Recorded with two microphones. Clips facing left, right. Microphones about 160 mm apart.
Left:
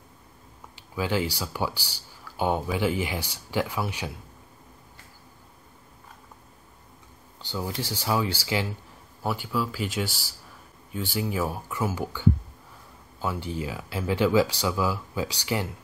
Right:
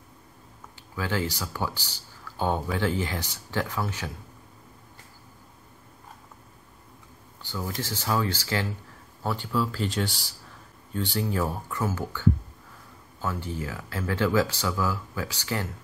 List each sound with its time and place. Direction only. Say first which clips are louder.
0.9 s speech: left 2 dB; 15° left (ahead or behind)
7.4 s speech: left 1 dB; 20° left (ahead or behind)